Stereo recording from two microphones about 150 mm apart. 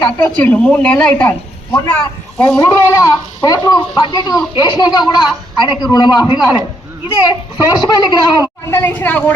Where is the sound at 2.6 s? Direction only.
20° left (ahead or behind).